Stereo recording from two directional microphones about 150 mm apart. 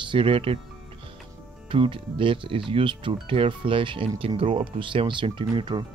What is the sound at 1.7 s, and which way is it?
Speech, 35° right (ahead or behind).